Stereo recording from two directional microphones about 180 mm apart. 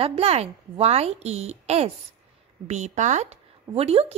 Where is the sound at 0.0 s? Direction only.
35° right (ahead or behind).